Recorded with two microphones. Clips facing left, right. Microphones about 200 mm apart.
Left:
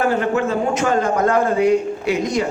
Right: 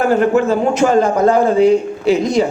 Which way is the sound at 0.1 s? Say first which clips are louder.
Right 6 dB; 40° right (ahead or behind).